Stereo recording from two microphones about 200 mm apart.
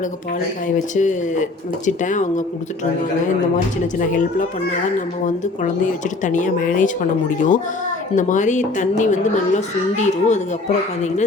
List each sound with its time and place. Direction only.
0.9 s speech: 40° left (ahead or behind)
3.9 s speech: 40° left (ahead or behind)